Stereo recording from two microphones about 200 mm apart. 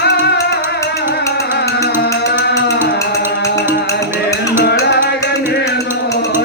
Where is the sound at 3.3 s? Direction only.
55° left (ahead or behind).